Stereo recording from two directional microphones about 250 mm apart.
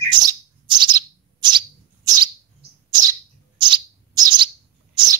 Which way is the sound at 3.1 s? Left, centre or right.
Centre.